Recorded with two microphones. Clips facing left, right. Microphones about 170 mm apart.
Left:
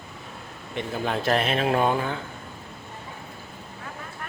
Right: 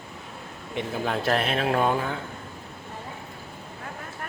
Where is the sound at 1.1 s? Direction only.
Centre (ahead or behind).